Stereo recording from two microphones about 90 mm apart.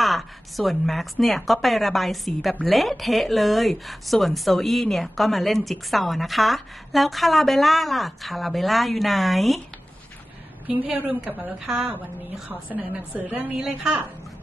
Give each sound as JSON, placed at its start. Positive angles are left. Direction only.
{"t": 0.0, "sound": "a woman's voice", "side_deg": 0}
{"t": 10.7, "sound": "a woman's voice", "side_deg": -20}
{"t": 12.4, "sound": "a woman's voice", "side_deg": -20}
{"t": 13.6, "sound": "a woman's voice", "side_deg": -10}